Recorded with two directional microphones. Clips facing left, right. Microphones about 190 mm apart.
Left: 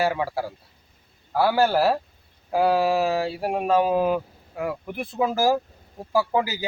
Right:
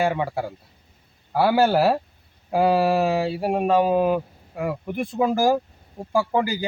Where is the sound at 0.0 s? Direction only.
Centre (ahead or behind).